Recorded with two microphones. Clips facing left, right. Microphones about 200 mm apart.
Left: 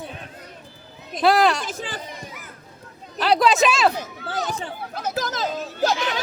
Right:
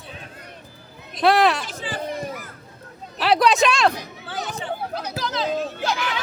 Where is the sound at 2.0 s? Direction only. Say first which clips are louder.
Right 8 dB; 60° right (ahead or behind).